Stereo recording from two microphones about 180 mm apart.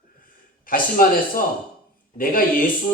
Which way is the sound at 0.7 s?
50° left (ahead or behind).